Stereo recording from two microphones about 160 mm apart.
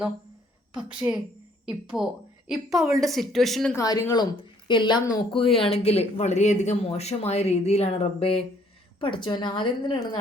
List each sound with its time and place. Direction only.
0.7 s a woman's voice: 5° right (ahead or behind)
3.8 s a woman's voice: 20° left (ahead or behind)